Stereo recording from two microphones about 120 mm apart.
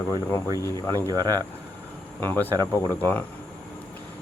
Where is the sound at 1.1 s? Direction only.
30° right (ahead or behind).